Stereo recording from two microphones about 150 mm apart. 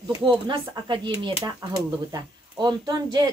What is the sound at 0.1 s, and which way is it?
Speech, 30° right (ahead or behind).